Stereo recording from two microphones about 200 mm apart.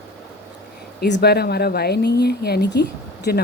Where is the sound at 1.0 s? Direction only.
55° left (ahead or behind).